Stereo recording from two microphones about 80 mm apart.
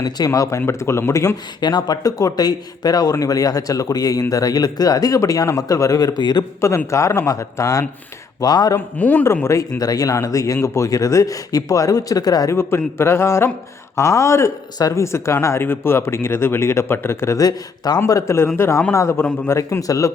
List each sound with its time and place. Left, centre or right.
0.3 s speech: left
1.6 s speech: left
6.6 s speech: left
8.4 s speech: left
9.0 s speech: left
9.2 s speech: left
12.5 s speech: left
17.4 s speech: left
18.1 s speech: left